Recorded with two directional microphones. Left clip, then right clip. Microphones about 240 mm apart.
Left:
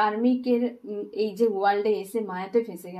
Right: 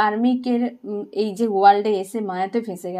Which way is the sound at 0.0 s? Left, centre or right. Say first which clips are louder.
Right 4 dB; right.